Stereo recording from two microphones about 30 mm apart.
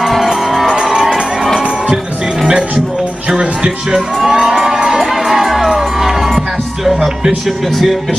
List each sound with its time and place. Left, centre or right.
0.1 s music: centre
0.8 s crowd: centre
4.7 s crowd: centre
5.0 s music: centre
6.8 s speech: centre